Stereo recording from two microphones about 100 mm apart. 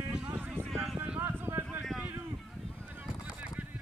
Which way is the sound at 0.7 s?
5° right (ahead or behind).